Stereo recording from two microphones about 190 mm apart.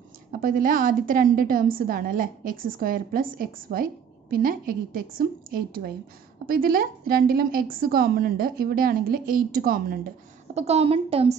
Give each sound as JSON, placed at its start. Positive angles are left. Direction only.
{"t": 0.3, "sound": "a woman's voice", "side_deg": -45}
{"t": 10.5, "sound": "a woman's voice", "side_deg": -35}